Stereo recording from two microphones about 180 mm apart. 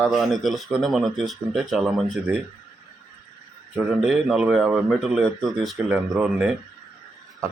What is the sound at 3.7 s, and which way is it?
Speech, centre (ahead or behind).